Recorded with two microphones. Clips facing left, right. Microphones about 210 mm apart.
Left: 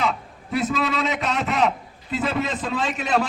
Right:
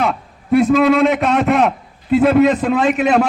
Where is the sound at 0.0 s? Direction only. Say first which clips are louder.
Right 6 dB; 55° right (ahead or behind).